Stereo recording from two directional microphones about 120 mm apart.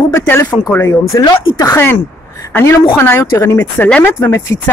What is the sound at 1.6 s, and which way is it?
Speech, 20° left (ahead or behind).